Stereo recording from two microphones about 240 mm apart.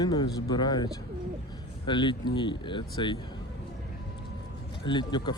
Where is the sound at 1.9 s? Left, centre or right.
Centre.